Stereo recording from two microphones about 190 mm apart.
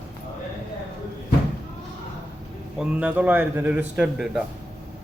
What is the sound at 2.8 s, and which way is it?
A man's voice, 5° right (ahead or behind).